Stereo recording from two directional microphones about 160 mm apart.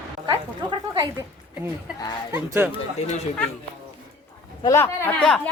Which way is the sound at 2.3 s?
15° right (ahead or behind).